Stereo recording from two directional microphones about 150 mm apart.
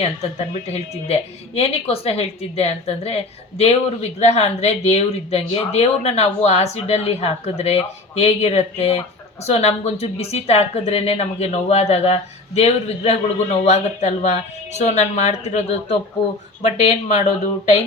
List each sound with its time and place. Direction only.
0.0 s speech: 45° left (ahead or behind)